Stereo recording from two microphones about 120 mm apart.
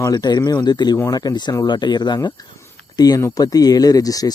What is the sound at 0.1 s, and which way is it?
Speech, 35° left (ahead or behind).